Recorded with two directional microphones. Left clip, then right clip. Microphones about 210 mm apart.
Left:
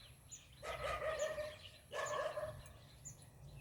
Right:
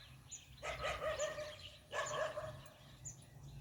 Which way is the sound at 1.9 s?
30° right (ahead or behind).